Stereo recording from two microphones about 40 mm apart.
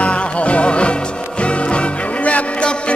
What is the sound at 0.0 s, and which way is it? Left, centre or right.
Music, left.